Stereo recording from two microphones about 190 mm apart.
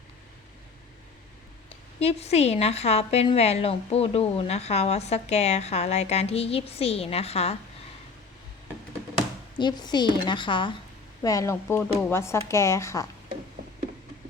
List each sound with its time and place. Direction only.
2.0 s a woman's voice: 35° left (ahead or behind)
9.6 s a woman's voice: 20° left (ahead or behind)